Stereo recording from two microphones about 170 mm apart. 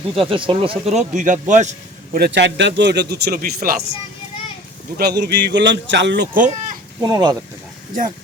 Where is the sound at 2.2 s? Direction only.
90° right; by 3.7 s 60° right (ahead or behind).